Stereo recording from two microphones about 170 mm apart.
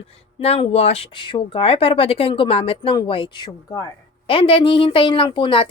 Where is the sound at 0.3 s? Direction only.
35° left (ahead or behind).